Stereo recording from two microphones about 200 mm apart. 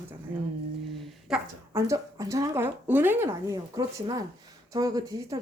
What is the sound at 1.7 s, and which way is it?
Speech, 15° right (ahead or behind).